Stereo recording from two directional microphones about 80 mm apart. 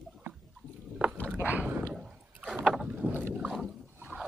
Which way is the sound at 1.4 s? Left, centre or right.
Right.